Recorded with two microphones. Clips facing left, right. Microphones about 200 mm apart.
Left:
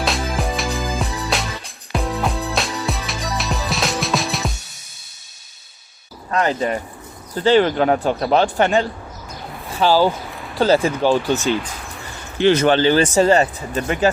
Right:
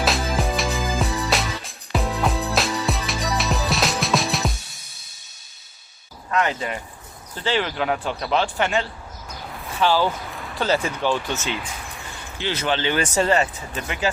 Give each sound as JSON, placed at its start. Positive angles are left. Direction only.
{"t": 0.0, "sound": "music", "side_deg": 0}
{"t": 6.3, "sound": "speech", "side_deg": 35}
{"t": 12.4, "sound": "speech", "side_deg": 50}
{"t": 12.9, "sound": "speech", "side_deg": 30}